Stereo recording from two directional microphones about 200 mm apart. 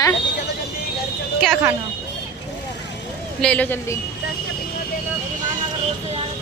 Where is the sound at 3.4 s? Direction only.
5° left (ahead or behind).